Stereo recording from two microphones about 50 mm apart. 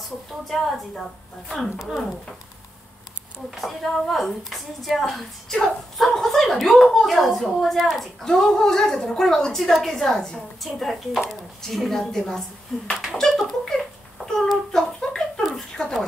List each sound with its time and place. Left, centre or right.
1.5 s a woman's voice: centre
3.4 s a woman's voice: centre
8.2 s a woman's voice: centre
14.2 s child singing: centre
14.5 s a sound: centre
15.7 s dog: centre